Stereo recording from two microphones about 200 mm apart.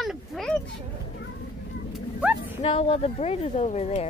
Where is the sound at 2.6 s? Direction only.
30° left (ahead or behind).